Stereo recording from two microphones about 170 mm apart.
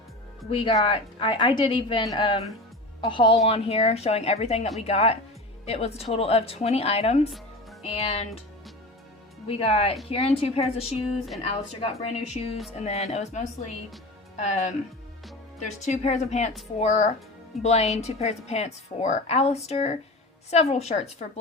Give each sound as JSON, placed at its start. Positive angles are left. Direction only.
{"t": 0.5, "sound": "a woman's voice", "side_deg": 30}
{"t": 9.5, "sound": "a woman's voice", "side_deg": 35}